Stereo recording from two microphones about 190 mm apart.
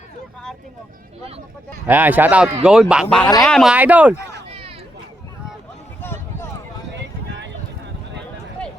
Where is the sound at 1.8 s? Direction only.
10° right (ahead or behind).